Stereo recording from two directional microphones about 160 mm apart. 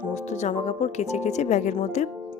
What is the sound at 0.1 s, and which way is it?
Speech, 45° left (ahead or behind).